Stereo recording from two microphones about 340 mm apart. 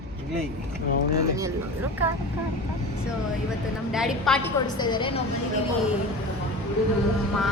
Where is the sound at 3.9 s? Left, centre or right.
Centre.